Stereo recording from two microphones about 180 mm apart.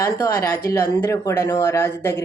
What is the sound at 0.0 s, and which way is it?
Speech, 20° left (ahead or behind).